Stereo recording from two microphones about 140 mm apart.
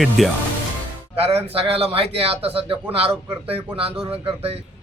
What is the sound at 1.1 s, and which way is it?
Speech, 45° right (ahead or behind).